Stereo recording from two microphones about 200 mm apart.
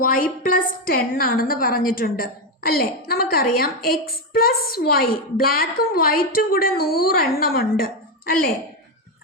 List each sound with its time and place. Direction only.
0.0 s a woman's voice: 45° left (ahead or behind)